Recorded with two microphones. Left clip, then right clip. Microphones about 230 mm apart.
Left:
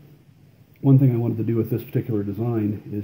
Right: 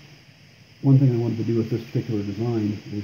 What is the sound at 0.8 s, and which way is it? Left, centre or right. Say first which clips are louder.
Speech: left 1 dB; centre.